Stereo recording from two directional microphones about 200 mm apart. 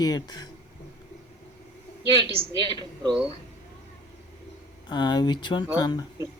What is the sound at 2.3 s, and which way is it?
Speech, 25° right (ahead or behind).